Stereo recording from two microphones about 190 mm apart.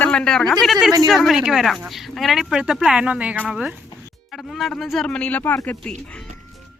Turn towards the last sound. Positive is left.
turn(degrees=10)  # may be behind; listen again after turning